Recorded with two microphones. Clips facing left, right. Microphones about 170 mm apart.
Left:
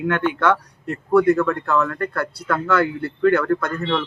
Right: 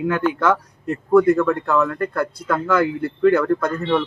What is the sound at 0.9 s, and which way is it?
Speech, 15° right (ahead or behind).